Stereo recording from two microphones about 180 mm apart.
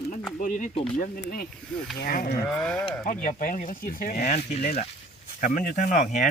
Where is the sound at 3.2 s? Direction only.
50° left (ahead or behind).